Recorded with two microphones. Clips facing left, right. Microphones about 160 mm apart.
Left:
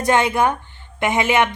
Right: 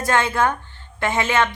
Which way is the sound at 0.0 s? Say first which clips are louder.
Left 3 dB; 20° left (ahead or behind).